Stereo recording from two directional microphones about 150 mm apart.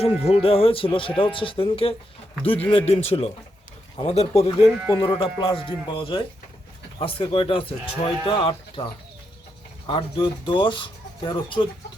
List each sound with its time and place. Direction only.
0.0 s speech: 40° left (ahead or behind)
4.6 s speech: 5° right (ahead or behind)
4.9 s speech: 35° left (ahead or behind)